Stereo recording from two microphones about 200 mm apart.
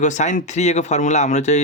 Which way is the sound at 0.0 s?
35° left (ahead or behind).